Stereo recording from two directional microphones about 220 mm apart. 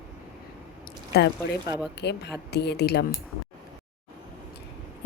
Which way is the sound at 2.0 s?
50° left (ahead or behind).